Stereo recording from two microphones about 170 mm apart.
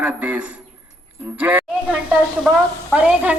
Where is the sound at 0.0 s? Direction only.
10° right (ahead or behind).